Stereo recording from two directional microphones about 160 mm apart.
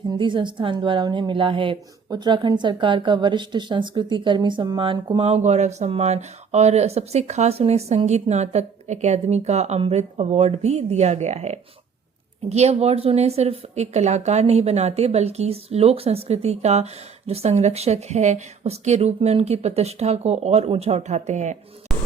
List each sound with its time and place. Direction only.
0.1 s a woman's voice: 30° right (ahead or behind); by 21.6 s 45° right (ahead or behind)